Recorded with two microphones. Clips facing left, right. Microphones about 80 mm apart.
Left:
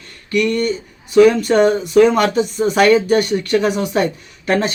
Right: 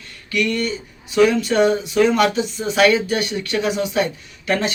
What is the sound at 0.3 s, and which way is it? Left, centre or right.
Speech, left.